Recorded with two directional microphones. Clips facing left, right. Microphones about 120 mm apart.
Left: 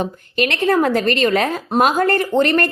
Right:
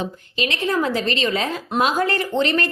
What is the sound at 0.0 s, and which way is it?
A woman's voice, 60° left (ahead or behind).